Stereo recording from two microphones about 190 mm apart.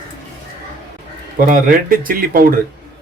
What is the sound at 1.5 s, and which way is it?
Speech, 50° right (ahead or behind).